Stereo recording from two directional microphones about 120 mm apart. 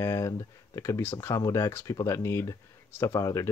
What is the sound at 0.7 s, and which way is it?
Speech, 25° left (ahead or behind).